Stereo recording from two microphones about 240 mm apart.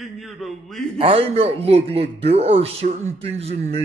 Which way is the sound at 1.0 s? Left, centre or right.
Right.